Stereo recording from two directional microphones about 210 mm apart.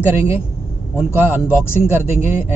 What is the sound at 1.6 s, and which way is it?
Speech, 10° left (ahead or behind).